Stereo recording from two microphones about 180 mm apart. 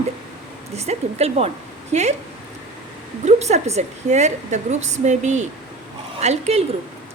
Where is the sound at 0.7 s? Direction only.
35° right (ahead or behind).